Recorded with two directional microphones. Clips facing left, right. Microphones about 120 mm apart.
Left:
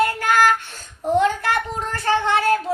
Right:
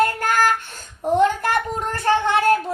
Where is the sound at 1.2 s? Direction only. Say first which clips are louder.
Right 5 dB; 50° right (ahead or behind).